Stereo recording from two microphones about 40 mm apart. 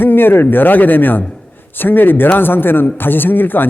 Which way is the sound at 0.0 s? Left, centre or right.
Left.